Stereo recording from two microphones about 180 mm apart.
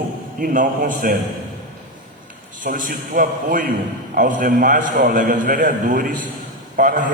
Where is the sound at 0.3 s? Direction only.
50° right (ahead or behind).